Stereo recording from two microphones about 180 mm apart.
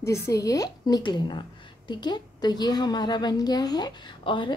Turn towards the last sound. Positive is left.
turn(degrees=25)  # may be behind; listen again after turning